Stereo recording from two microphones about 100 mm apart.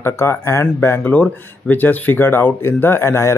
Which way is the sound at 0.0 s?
25° left (ahead or behind).